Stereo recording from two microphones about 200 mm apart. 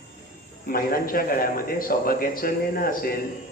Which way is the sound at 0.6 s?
45° left (ahead or behind).